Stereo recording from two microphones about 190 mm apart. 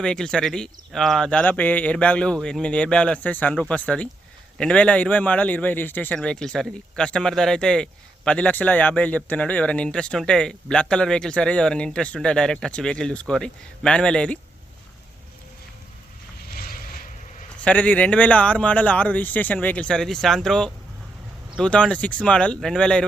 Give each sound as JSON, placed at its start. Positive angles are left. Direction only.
{"t": 0.0, "sound": "a man's voice", "side_deg": 5}
{"t": 16.5, "sound": "boat", "side_deg": 50}
{"t": 17.6, "sound": "a man's voice", "side_deg": 10}